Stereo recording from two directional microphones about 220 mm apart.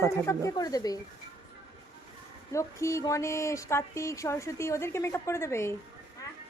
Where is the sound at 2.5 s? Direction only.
15° left (ahead or behind).